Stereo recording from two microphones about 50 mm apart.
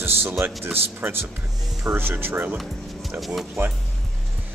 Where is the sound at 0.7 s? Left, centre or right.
Right.